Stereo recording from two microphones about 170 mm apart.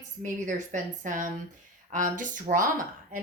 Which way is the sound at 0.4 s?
50° right (ahead or behind).